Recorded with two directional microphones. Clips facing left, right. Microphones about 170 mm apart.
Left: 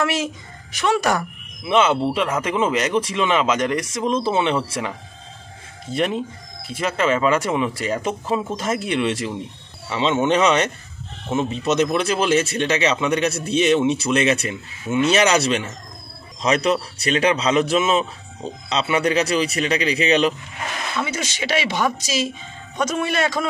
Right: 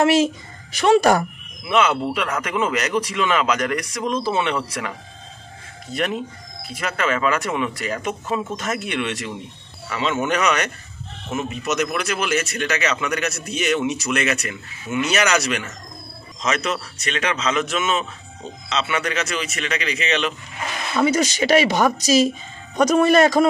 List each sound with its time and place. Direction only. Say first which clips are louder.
0.0 s speech: right 6 dB; 30° right (ahead or behind)
1.6 s a man's voice: left 2 dB; 25° left (ahead or behind)
21.0 s speech: right 11 dB; 40° right (ahead or behind)